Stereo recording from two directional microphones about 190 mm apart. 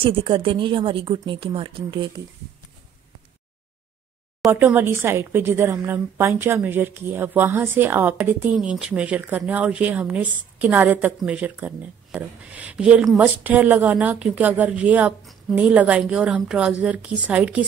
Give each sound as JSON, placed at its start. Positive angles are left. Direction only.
{"t": 0.0, "sound": "a woman's voice", "side_deg": -30}
{"t": 4.5, "sound": "speech", "side_deg": -10}